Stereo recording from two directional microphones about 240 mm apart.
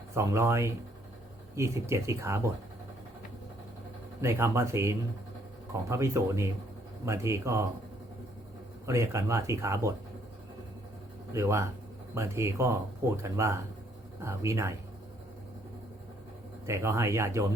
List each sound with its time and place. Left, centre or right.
0.1 s speech: centre
4.2 s speech: centre
8.9 s speech: centre
11.3 s speech: centre
16.6 s speech: centre